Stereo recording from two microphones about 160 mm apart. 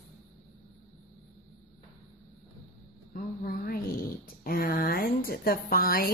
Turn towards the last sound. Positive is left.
turn(degrees=65)  # may be behind; listen again after turning